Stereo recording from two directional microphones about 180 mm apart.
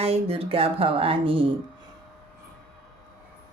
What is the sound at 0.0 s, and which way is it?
Speech, 35° right (ahead or behind).